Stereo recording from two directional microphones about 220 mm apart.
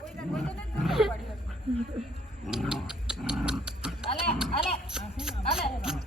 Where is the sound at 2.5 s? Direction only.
Centre (ahead or behind).